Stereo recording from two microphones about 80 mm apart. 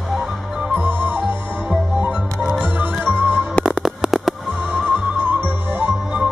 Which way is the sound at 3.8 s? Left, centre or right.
Centre.